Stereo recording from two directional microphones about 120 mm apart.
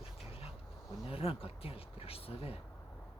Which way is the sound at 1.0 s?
50° left (ahead or behind).